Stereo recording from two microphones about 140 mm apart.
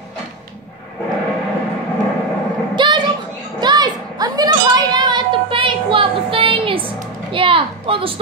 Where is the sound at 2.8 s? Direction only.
35° right (ahead or behind).